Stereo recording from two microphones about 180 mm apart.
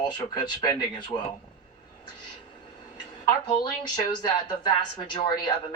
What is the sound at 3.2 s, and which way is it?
Speech, 25° left (ahead or behind).